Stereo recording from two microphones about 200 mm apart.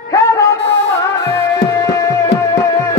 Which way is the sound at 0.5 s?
60° left (ahead or behind).